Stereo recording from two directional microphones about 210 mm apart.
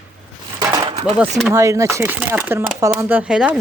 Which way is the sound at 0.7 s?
25° right (ahead or behind).